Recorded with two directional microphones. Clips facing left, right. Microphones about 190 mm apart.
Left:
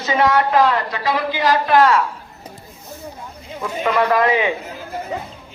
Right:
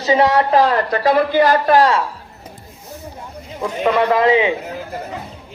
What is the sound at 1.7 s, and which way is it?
Speech, 35° right (ahead or behind).